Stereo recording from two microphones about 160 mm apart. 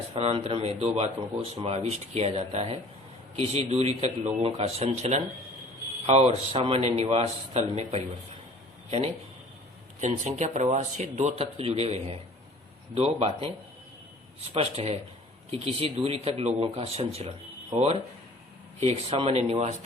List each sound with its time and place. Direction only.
0.1 s speech: 35° right (ahead or behind)
10.0 s speech: 45° right (ahead or behind)
14.5 s speech: 40° right (ahead or behind)